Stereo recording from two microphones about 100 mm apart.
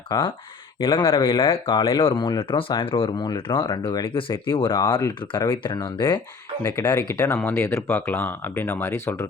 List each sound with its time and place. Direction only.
0.1 s speech: 50° left (ahead or behind)
4.8 s speech: 50° left (ahead or behind)
6.6 s speech: 25° left (ahead or behind)